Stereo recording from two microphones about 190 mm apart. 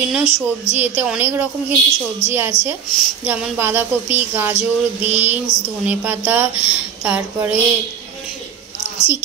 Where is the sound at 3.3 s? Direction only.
10° right (ahead or behind).